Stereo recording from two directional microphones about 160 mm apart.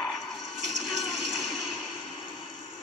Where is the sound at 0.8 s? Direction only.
Centre (ahead or behind).